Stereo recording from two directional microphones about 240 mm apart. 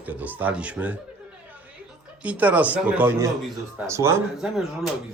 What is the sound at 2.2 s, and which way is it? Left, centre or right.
A man's voice, centre.